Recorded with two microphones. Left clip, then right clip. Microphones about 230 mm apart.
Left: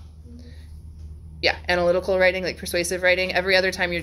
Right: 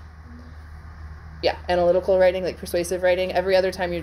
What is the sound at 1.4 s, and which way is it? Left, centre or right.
Speech, left.